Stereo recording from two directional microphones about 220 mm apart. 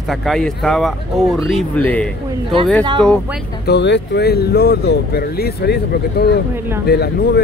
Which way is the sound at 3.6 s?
50° left (ahead or behind).